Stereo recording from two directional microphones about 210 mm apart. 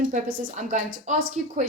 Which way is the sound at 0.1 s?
40° right (ahead or behind).